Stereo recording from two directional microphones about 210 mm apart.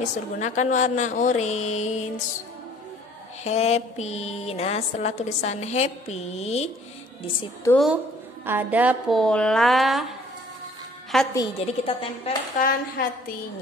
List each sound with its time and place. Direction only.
0.0 s a woman's voice: 35° left (ahead or behind)
3.4 s a woman's voice: 30° left (ahead or behind)
8.5 s a woman's voice: 10° right (ahead or behind)
11.1 s a woman's voice: centre (ahead or behind)
11.6 s a woman's voice: 30° left (ahead or behind)
12.5 s a woman's voice: 45° left (ahead or behind)